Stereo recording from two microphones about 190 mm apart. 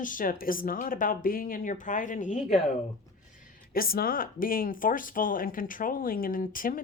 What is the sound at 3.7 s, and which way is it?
Speech, 50° left (ahead or behind).